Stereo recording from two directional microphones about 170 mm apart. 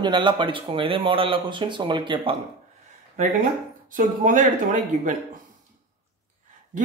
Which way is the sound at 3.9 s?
55° right (ahead or behind).